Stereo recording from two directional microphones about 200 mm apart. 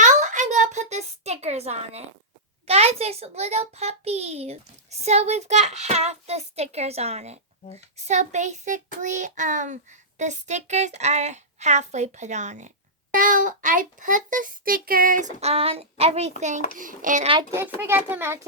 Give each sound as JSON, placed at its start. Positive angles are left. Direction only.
{"t": 0.0, "sound": "a sound", "side_deg": -35}
{"t": 2.6, "sound": "a child's voice", "side_deg": -30}
{"t": 17.7, "sound": "a child's voice", "side_deg": -10}